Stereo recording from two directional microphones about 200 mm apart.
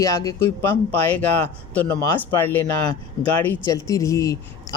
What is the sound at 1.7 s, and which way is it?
Speech, 10° left (ahead or behind).